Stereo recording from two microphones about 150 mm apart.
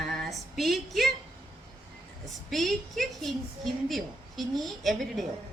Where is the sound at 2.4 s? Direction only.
Centre (ahead or behind).